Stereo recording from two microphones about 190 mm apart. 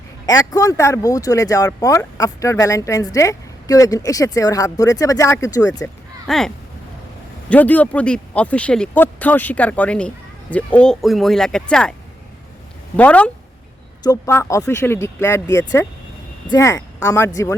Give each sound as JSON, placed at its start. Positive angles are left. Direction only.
{"t": 0.3, "sound": "speech", "side_deg": 20}
{"t": 6.2, "sound": "speech", "side_deg": 0}
{"t": 7.5, "sound": "speech", "side_deg": 10}
{"t": 13.0, "sound": "speech", "side_deg": 5}